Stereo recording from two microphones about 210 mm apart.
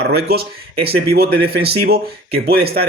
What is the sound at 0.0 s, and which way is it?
Speech, 50° right (ahead or behind).